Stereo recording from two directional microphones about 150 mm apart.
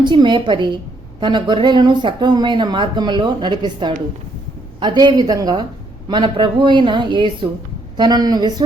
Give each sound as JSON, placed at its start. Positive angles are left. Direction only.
{"t": 0.0, "sound": "a woman's voice", "side_deg": -30}